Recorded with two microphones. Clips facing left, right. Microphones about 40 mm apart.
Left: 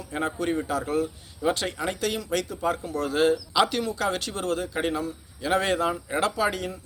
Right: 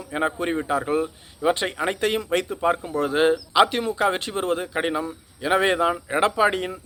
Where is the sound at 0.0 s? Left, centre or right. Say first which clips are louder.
Right 3 dB; right.